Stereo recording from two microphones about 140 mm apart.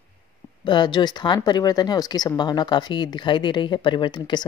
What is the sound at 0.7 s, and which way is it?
A woman's voice, 30° left (ahead or behind).